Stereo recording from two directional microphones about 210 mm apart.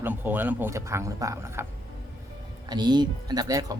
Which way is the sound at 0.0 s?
10° right (ahead or behind).